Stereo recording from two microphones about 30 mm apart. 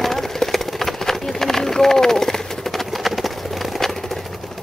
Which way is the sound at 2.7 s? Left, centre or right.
Centre.